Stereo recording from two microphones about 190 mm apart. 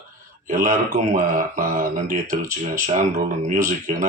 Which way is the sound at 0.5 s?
40° right (ahead or behind).